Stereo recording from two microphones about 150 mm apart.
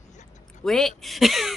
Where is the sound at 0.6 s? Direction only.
Centre (ahead or behind).